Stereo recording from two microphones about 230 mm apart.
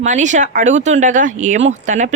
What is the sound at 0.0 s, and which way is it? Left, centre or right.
A woman's voice, right.